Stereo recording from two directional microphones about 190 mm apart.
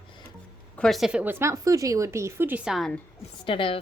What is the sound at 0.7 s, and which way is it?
Speech, centre (ahead or behind).